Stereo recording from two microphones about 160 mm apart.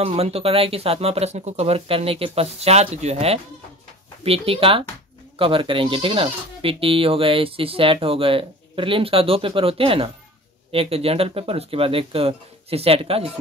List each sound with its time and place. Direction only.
0.0 s speech: 40° right (ahead or behind)